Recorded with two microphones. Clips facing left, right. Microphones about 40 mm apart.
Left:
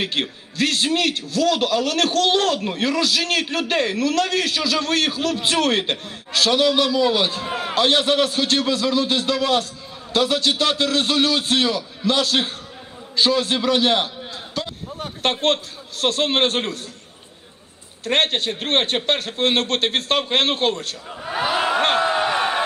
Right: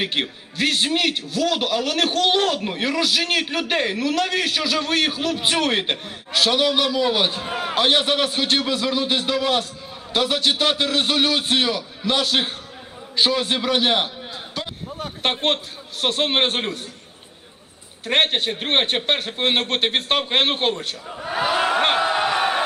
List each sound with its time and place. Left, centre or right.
0.0 s a man's voice: right
7.4 s a sound: centre
7.7 s a man's voice: right
14.8 s a sound: centre
15.2 s a man's voice: right
18.0 s a man's voice: right
21.1 s speech: centre
21.8 s speech: centre
22.1 s a sound: centre